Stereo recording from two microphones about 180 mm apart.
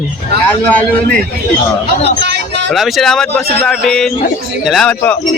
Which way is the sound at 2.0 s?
70° right (ahead or behind).